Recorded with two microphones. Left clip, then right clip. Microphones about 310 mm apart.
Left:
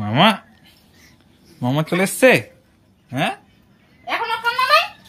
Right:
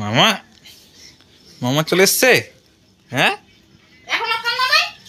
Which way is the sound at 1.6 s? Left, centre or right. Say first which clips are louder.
Right 5 dB; centre.